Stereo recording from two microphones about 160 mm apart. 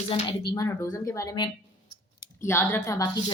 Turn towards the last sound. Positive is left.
turn(degrees=15)  # may be behind; listen again after turning